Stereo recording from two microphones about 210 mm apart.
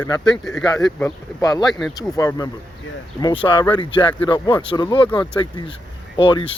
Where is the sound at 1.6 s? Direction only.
Centre (ahead or behind).